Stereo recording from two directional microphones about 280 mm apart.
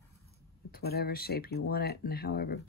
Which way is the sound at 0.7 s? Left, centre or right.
Left.